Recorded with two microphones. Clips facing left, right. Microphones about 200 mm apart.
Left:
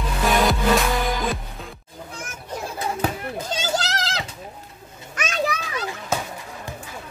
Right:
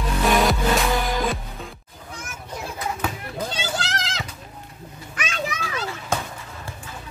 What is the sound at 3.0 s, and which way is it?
Children playing, 40° left (ahead or behind).